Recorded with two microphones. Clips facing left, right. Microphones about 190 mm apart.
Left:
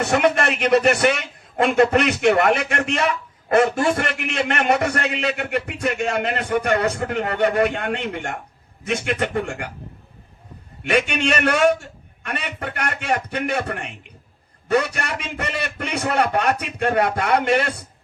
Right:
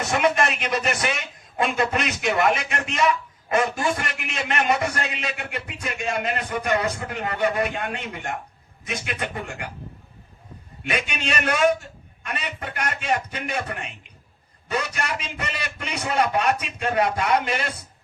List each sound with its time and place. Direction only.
0.0 s a man's voice: 65° left (ahead or behind)
10.8 s a man's voice: 65° left (ahead or behind)